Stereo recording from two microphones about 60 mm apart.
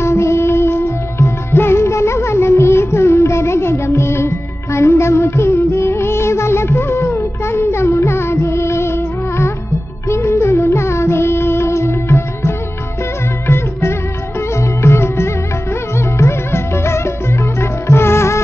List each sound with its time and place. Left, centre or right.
0.0 s music: left
4.7 s music of bollywood: left
10.0 s music: left